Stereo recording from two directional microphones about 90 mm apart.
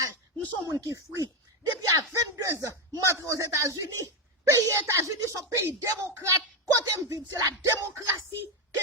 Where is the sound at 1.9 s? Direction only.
30° right (ahead or behind).